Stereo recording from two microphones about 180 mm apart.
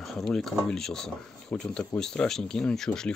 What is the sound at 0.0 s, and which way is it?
Speech, 5° left (ahead or behind).